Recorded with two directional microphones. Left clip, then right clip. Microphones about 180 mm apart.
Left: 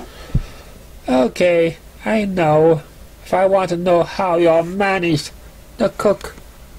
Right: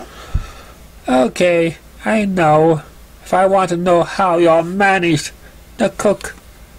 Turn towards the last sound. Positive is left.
turn(degrees=-20)  # may be behind; listen again after turning